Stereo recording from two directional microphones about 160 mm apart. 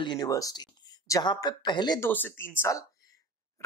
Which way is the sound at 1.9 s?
15° left (ahead or behind).